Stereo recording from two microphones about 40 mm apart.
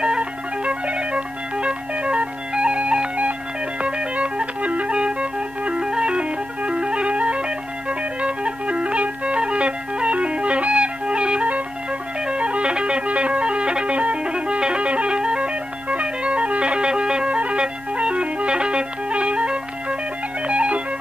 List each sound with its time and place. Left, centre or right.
0.0 s music: right
13.9 s music: right
14.2 s music: right
20.4 s organ: right